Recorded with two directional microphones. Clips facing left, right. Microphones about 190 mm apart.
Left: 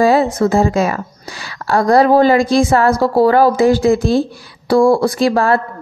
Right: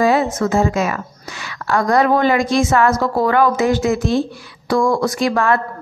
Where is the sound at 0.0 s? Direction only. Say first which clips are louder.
Left 3 dB; 35° left (ahead or behind).